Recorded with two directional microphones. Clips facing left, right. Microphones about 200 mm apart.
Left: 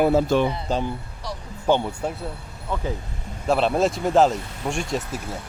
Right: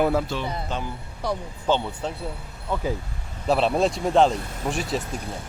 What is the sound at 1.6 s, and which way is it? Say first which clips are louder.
Speech: left 3 dB; 10° left (ahead or behind).